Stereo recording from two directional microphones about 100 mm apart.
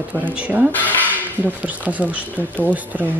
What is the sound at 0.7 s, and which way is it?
Speech, 15° left (ahead or behind).